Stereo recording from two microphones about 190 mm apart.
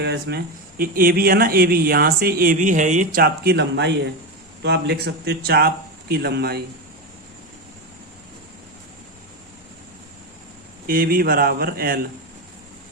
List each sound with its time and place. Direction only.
0.0 s a man's voice: 60° right (ahead or behind)
10.8 s speech: 50° right (ahead or behind)